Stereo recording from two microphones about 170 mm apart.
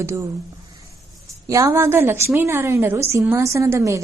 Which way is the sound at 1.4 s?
20° right (ahead or behind).